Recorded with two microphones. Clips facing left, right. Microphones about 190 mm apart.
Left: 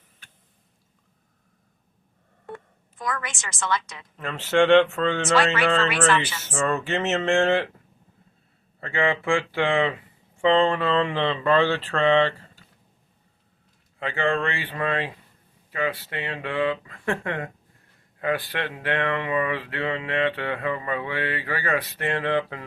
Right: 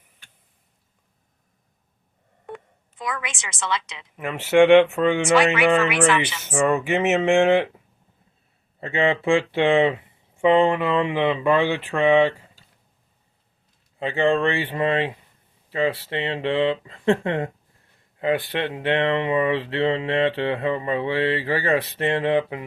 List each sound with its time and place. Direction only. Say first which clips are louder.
3.1 s speech: even; 20° right (ahead or behind)
8.8 s speech: right 3 dB; 20° right (ahead or behind)
14.0 s speech: right 5 dB; 20° right (ahead or behind)